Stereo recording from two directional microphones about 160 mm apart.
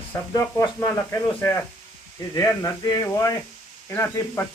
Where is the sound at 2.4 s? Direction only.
20° left (ahead or behind).